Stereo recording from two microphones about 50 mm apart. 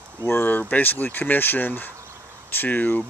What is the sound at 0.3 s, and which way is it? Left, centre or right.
Speech, left.